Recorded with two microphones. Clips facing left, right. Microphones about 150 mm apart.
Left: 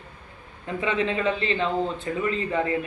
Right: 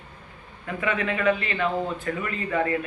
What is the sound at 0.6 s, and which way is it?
A man's voice, 25° left (ahead or behind).